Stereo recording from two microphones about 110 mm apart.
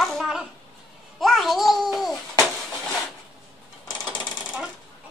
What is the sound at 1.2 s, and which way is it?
A child's voice, centre (ahead or behind).